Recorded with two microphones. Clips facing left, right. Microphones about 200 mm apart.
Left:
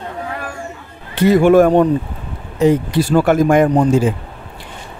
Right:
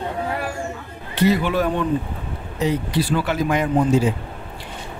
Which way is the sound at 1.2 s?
50° left (ahead or behind).